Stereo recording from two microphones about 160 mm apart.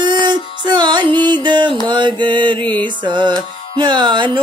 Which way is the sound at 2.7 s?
30° right (ahead or behind).